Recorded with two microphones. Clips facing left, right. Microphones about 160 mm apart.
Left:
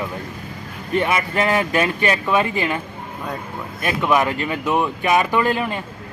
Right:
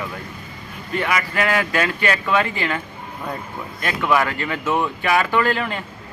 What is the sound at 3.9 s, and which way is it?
Speech, 20° left (ahead or behind).